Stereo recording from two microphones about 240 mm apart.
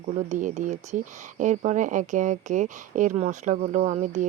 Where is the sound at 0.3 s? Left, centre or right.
Right.